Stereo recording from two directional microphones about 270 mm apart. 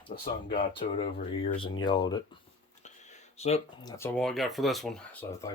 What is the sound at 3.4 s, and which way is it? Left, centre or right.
Speech, left.